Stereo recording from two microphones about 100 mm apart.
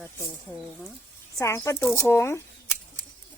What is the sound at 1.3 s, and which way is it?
Speech, 30° left (ahead or behind).